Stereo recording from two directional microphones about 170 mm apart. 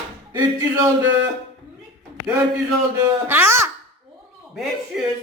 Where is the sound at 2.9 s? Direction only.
15° right (ahead or behind).